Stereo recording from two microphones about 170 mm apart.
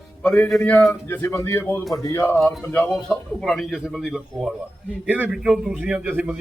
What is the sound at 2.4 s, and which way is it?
A man's voice, 5° left (ahead or behind).